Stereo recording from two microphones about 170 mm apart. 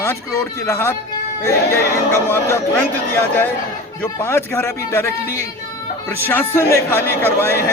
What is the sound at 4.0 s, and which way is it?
A man's voice, 15° left (ahead or behind).